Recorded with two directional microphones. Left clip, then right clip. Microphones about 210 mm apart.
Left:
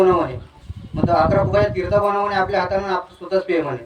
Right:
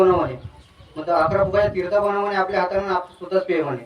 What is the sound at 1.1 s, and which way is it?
A man's voice, 25° left (ahead or behind).